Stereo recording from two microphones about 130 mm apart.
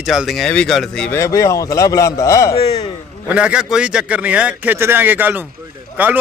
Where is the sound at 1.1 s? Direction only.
25° left (ahead or behind).